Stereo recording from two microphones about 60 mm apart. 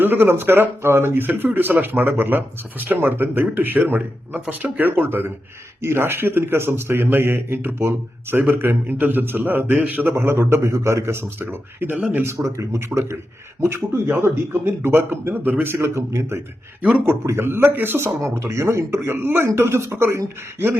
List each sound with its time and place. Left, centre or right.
0.0 s a man's voice: right
12.2 s a man's voice: right
18.3 s a man's voice: right
19.5 s a man's voice: right